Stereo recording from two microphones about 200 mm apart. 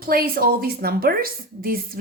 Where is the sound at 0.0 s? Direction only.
45° right (ahead or behind).